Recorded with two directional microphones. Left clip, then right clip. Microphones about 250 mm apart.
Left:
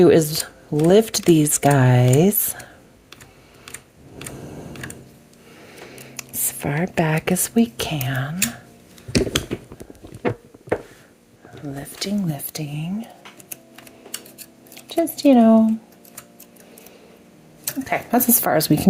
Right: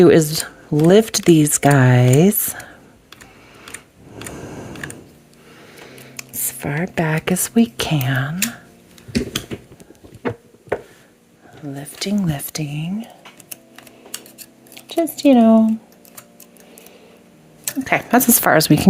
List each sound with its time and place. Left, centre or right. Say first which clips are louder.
0.0 s speech: right 2 dB; right
4.4 s typing: right 4 dB; right
6.3 s speech: even; centre
11.6 s speech: right 2 dB; centre
12.2 s speech: right 4 dB; right
14.9 s speech: right 1 dB; right
17.7 s speech: right 5 dB; right